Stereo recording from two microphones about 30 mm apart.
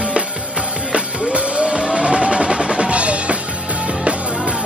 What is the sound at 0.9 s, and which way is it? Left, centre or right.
Music, right.